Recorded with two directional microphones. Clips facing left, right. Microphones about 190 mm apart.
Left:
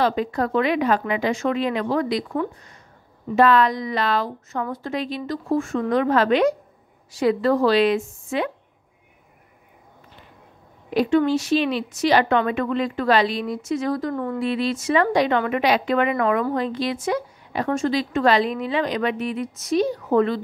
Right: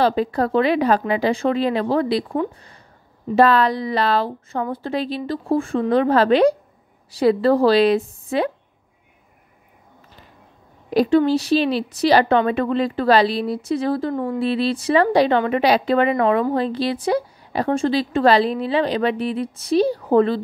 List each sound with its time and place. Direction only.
0.0 s a woman's voice: 35° right (ahead or behind)
10.9 s a woman's voice: 35° right (ahead or behind)